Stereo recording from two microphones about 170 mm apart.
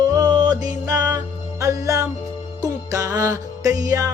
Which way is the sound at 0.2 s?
25° right (ahead or behind).